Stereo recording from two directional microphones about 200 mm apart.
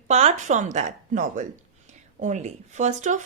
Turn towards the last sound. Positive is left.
turn(degrees=-35)  # may be behind; listen again after turning